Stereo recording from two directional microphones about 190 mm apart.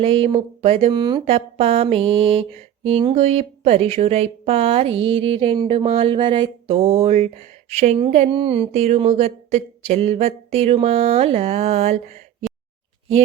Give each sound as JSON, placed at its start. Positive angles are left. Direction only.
{"t": 0.0, "sound": "speech", "side_deg": -30}